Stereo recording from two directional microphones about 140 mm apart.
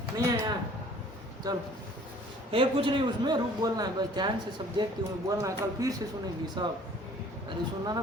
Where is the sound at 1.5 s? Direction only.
30° right (ahead or behind).